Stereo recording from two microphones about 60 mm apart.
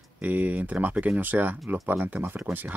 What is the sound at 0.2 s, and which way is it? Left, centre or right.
Speech, right.